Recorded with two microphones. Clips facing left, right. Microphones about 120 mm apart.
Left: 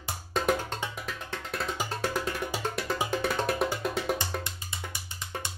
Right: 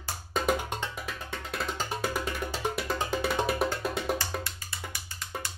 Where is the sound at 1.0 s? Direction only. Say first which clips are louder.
Even; centre (ahead or behind).